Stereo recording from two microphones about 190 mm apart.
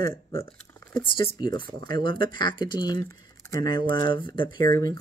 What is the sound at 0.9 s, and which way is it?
Speech, 25° left (ahead or behind).